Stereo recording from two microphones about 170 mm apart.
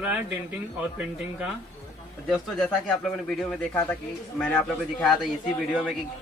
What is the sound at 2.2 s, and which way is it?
Speech, centre (ahead or behind).